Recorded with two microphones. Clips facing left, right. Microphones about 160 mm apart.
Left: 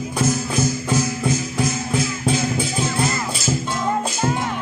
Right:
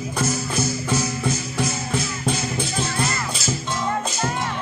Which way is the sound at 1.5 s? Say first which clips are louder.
Left 3 dB; 5° left (ahead or behind).